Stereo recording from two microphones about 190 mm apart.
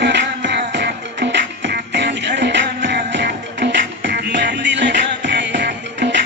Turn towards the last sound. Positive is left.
turn(degrees=-65)  # may be behind; listen again after turning